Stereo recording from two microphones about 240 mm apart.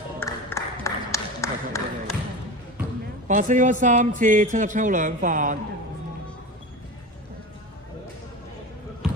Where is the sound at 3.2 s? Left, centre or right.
Right.